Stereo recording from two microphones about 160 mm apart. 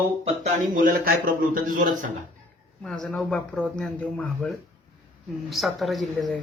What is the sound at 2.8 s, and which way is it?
Speech, 5° left (ahead or behind).